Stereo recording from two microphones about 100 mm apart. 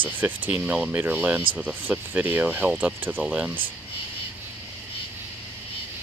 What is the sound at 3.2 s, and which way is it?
Speech, 5° right (ahead or behind).